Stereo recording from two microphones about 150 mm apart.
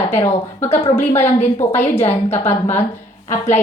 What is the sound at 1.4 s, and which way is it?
A woman's voice, 15° left (ahead or behind).